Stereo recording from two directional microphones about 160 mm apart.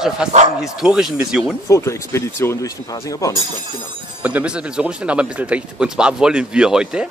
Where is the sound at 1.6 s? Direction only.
20° left (ahead or behind).